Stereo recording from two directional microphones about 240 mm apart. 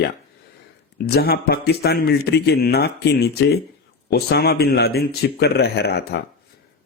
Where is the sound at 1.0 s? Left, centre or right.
Left.